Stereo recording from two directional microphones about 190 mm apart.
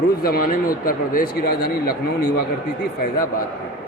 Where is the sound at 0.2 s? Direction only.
50° left (ahead or behind).